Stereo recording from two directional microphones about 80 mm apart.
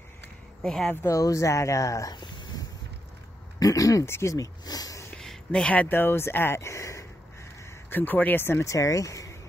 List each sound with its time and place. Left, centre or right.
0.6 s speech: centre
1.0 s speech: left
2.1 s a sound: left
3.5 s speech: left
4.0 s speech: left
5.1 s speech: centre; by 7.1 s left
7.9 s speech: left
8.7 s speech: left